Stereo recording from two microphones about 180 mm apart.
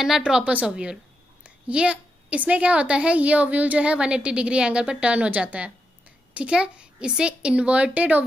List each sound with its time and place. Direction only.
0.0 s a woman's voice: 5° right (ahead or behind)